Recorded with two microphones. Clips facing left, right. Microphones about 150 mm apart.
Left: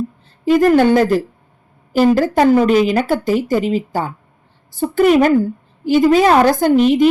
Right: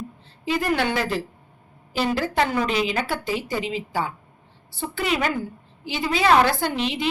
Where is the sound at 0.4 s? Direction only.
45° left (ahead or behind).